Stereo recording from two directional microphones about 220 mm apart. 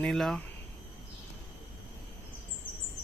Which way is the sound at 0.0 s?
Centre (ahead or behind).